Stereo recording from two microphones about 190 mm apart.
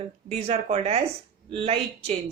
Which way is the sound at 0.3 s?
30° right (ahead or behind).